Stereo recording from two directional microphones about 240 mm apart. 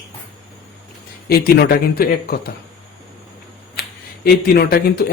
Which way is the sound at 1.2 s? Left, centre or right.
Left.